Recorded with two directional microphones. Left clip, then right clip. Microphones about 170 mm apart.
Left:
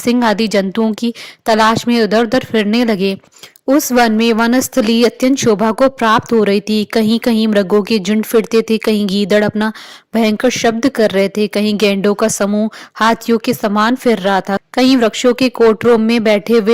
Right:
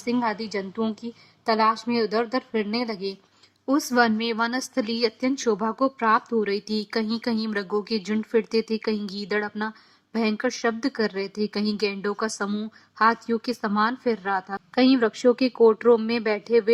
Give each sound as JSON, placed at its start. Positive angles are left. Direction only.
{"t": 0.0, "sound": "a woman's voice", "side_deg": 40}